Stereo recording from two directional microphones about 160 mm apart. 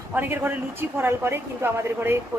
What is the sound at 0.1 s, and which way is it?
Speech, 15° right (ahead or behind).